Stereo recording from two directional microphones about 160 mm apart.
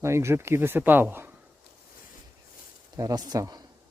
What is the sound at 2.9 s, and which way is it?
Speech, 20° right (ahead or behind).